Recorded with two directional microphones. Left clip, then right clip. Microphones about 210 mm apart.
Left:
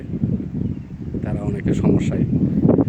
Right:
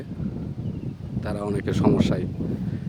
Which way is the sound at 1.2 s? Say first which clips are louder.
Left 1 dB; 15° right (ahead or behind).